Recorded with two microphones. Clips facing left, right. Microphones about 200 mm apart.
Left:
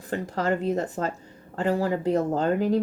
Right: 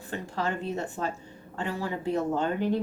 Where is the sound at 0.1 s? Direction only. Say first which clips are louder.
Left 6 dB; 40° left (ahead or behind).